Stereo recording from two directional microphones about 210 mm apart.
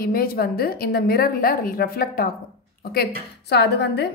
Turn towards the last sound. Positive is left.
turn(degrees=55)  # may be behind; listen again after turning